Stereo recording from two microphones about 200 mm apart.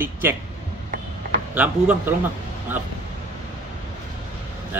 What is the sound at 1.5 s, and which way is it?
Speech, 10° right (ahead or behind).